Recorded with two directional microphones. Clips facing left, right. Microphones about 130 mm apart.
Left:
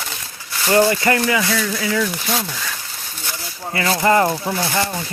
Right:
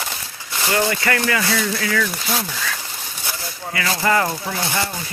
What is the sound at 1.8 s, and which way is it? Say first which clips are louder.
Speech: left 2 dB; 20° left (ahead or behind).